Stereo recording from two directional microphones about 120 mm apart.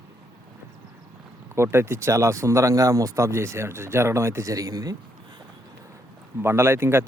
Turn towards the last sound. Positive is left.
turn(degrees=-20)  # may be behind; listen again after turning